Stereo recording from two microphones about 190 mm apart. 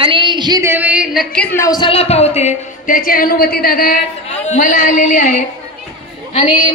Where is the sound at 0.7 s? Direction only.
5° right (ahead or behind); by 5.3 s 40° left (ahead or behind).